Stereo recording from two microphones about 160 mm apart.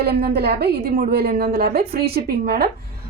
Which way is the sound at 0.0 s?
80° right.